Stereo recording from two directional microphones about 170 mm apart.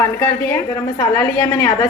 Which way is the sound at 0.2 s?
15° left (ahead or behind).